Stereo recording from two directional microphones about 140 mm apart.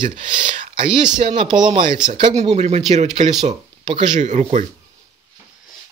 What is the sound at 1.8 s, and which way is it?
Speech, 35° right (ahead or behind).